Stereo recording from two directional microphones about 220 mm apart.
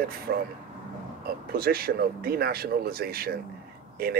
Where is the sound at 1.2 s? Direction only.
45° right (ahead or behind).